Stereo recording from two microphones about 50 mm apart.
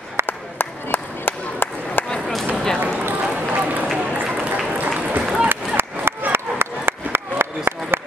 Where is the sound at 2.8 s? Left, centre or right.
Right.